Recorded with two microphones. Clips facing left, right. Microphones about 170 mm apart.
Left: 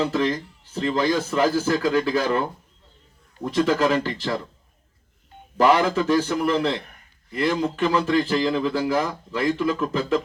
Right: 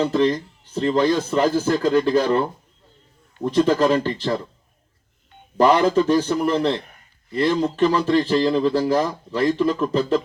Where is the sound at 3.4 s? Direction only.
35° right (ahead or behind).